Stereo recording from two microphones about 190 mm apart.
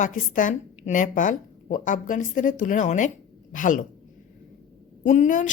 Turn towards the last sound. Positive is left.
turn(degrees=40)  # may be behind; listen again after turning